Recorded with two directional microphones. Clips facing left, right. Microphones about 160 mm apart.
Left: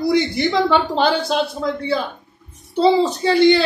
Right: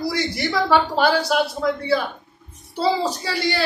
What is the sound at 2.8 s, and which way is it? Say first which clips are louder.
Speech: left 6 dB; 20° left (ahead or behind).